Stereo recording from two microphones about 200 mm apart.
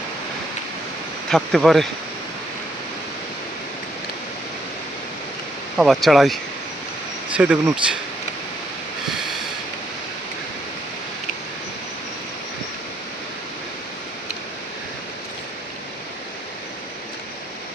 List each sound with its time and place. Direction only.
1.3 s speech: centre (ahead or behind)
5.7 s speech: centre (ahead or behind)